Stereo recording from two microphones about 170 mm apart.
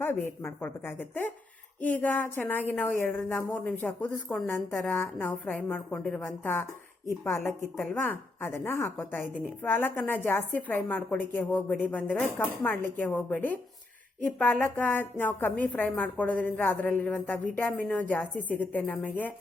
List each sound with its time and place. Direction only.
0.0 s a woman's voice: 10° left (ahead or behind)